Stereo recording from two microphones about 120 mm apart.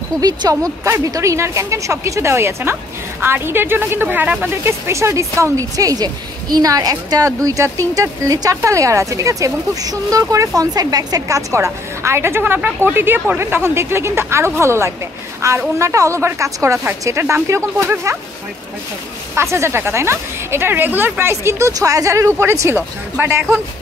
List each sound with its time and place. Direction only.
0.2 s speech: 30° right (ahead or behind)
19.3 s speech: 20° right (ahead or behind)